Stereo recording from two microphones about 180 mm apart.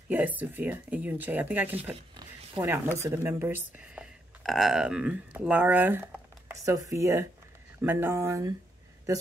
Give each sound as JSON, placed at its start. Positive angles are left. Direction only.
{"t": 0.1, "sound": "speech", "side_deg": -10}
{"t": 2.6, "sound": "speech", "side_deg": -30}
{"t": 3.0, "sound": "speech", "side_deg": -15}